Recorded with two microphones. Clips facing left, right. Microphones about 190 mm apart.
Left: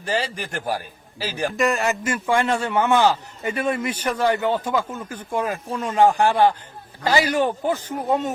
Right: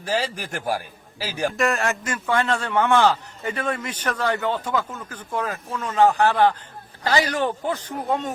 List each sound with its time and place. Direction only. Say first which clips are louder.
0.0 s a man's voice: even; 10° right (ahead or behind); by 7.9 s 10° left (ahead or behind)